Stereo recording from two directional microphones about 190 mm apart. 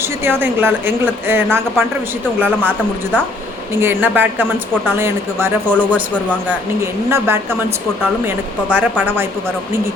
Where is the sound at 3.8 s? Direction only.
10° right (ahead or behind).